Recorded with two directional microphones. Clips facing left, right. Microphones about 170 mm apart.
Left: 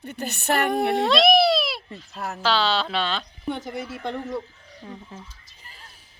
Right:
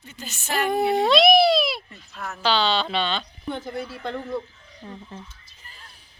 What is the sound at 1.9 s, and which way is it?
Speech, 35° left (ahead or behind).